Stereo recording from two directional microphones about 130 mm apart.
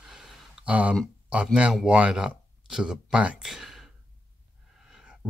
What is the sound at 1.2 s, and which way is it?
Speech, 10° right (ahead or behind).